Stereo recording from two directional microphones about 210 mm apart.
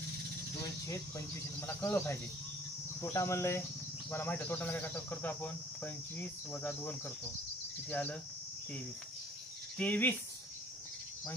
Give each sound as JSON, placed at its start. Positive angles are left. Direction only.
{"t": 0.8, "sound": "speech", "side_deg": 15}
{"t": 9.8, "sound": "speech", "side_deg": 10}